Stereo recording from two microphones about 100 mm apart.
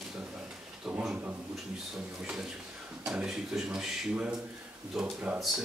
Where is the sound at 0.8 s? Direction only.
10° right (ahead or behind).